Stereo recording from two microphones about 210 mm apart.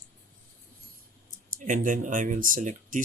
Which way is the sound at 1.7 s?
35° right (ahead or behind).